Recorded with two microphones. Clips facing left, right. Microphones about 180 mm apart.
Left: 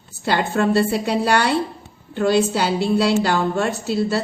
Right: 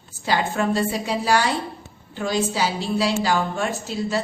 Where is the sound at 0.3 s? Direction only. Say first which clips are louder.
Left 3 dB; 70° left (ahead or behind).